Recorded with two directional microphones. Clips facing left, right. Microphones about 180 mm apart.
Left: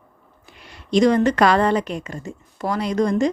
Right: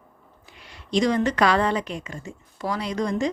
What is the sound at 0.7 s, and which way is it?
Speech, 50° left (ahead or behind).